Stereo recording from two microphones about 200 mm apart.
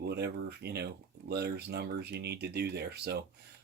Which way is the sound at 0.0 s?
55° right (ahead or behind).